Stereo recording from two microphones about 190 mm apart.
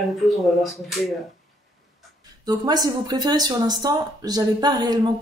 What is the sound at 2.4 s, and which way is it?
Speech, 20° right (ahead or behind).